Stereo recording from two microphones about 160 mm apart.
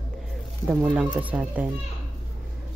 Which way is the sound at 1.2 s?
10° right (ahead or behind).